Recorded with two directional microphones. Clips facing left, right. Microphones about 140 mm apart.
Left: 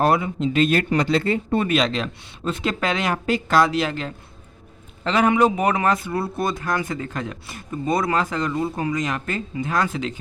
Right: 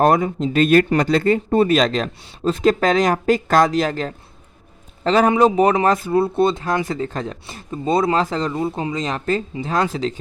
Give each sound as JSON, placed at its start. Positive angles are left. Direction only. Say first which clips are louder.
{"t": 0.0, "sound": "speech", "louder": "right 3 dB", "side_deg": -45}